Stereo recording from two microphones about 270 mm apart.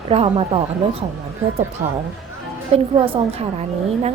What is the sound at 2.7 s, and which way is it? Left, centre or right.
Speech, right.